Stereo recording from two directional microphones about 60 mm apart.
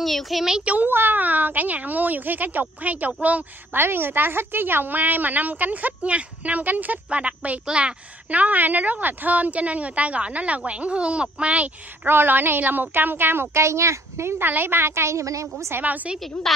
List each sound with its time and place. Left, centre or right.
0.0 s a child's voice: centre
0.7 s a woman's voice: right
3.7 s a woman's voice: right
12.1 s a woman's voice: right
14.4 s a woman's voice: right
15.7 s a woman's voice: right
16.5 s a child's voice: centre